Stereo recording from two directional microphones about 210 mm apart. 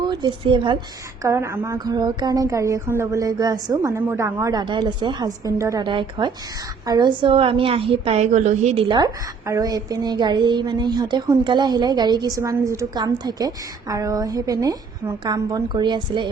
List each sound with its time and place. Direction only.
0.0 s a woman's voice: 20° right (ahead or behind)